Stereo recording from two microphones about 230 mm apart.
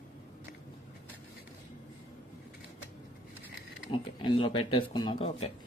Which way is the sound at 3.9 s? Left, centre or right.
Left.